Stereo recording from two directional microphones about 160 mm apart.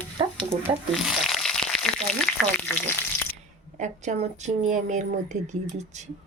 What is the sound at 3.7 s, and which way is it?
A woman's voice, 50° right (ahead or behind).